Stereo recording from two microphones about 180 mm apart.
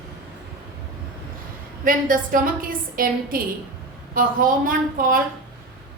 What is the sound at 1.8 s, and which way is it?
A woman's voice, 50° right (ahead or behind).